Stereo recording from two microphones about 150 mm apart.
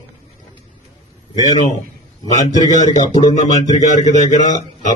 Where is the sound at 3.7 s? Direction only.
50° left (ahead or behind).